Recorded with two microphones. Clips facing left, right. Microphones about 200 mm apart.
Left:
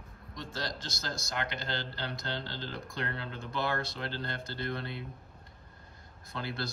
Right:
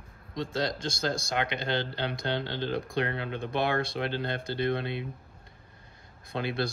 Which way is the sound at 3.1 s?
20° right (ahead or behind).